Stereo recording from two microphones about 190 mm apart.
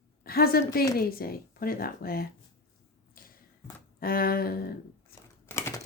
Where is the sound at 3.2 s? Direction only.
50° left (ahead or behind).